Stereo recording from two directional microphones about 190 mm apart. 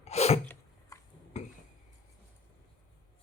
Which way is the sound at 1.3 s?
35° left (ahead or behind).